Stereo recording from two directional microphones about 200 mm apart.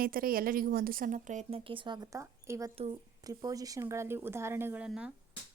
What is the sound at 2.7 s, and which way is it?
Speech, 30° right (ahead or behind).